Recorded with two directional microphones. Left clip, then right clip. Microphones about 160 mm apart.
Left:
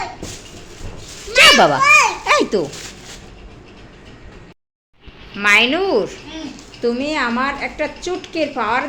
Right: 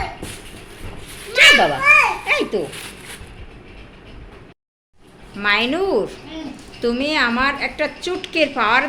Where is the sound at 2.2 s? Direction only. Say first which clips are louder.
Left 4 dB; 30° left (ahead or behind).